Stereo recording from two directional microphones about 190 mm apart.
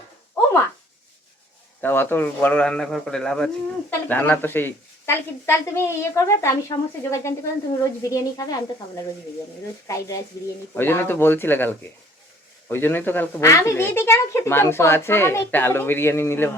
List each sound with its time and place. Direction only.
1.8 s a man's voice: 10° left (ahead or behind)
9.8 s a man's voice: 15° left (ahead or behind)